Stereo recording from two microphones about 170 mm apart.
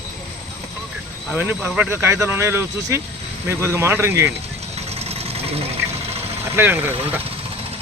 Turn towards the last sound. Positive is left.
turn(degrees=-10)  # may be behind; listen again after turning